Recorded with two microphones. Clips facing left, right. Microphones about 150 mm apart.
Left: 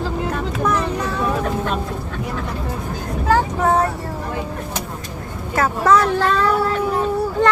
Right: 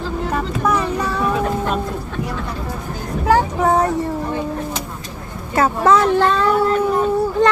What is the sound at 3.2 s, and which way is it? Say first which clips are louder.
Vehicle: right 2 dB; 10° right (ahead or behind).